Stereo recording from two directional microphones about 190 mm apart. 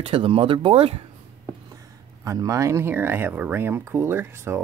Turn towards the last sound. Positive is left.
turn(degrees=-10)  # may be behind; listen again after turning